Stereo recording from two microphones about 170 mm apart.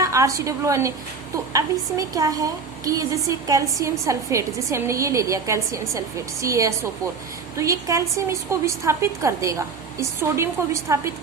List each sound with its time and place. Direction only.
0.0 s a woman's voice: 20° right (ahead or behind)